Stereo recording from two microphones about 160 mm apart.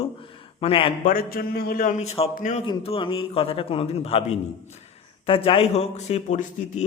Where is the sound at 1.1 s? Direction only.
65° left (ahead or behind).